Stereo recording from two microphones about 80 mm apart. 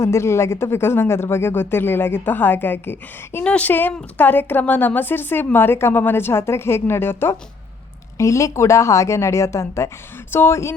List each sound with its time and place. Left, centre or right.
0.0 s speech: left
3.4 s speech: centre
8.2 s a woman's voice: left